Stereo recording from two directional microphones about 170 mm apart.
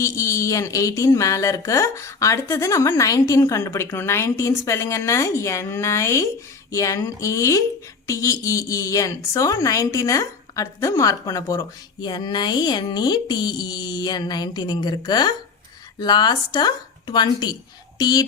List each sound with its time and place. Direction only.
0.0 s a woman's voice: 15° left (ahead or behind)